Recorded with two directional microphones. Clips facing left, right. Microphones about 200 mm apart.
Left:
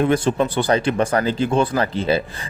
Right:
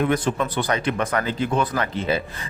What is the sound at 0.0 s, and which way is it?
Speech, 30° left (ahead or behind).